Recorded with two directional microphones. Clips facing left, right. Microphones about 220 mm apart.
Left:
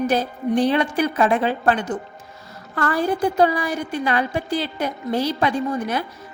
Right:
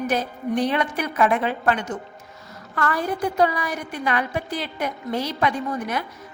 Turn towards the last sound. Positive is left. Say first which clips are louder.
# left 4 dB
turn(degrees=30)  # may be behind; listen again after turning